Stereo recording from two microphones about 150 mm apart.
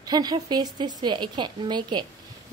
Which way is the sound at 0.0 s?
25° right (ahead or behind).